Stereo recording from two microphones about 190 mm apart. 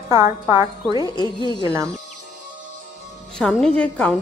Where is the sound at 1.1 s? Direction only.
20° left (ahead or behind).